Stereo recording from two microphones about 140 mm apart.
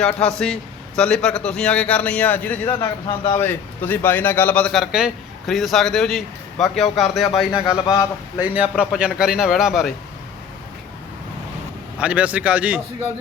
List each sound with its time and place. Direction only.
0.0 s a man's voice: 5° left (ahead or behind)
7.6 s a man's voice: 30° left (ahead or behind)
8.4 s a man's voice: 10° right (ahead or behind)
11.9 s a man's voice: 10° right (ahead or behind)